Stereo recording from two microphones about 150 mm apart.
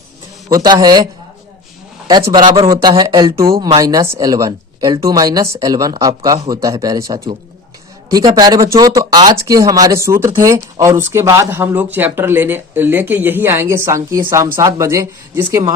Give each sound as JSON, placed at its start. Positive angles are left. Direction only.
{"t": 0.4, "sound": "speech", "side_deg": -25}
{"t": 2.0, "sound": "speech", "side_deg": -25}
{"t": 8.4, "sound": "speech", "side_deg": -25}